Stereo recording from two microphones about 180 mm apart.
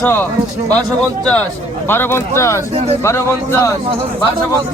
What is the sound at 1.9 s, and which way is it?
Speech, 15° left (ahead or behind).